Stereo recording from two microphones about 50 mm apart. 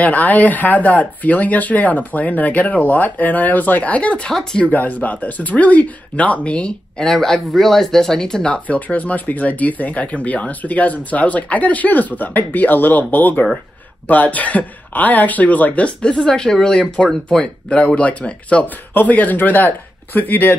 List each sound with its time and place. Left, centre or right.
0.0 s speech: left
4.3 s speech: centre
4.7 s speech: left
7.0 s speech: centre
8.5 s speech: left